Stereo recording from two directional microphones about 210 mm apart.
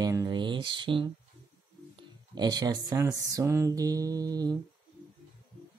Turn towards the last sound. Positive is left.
turn(degrees=-20)  # may be behind; listen again after turning